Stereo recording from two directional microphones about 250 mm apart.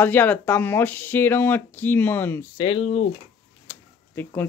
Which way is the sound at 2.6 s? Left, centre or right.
Left.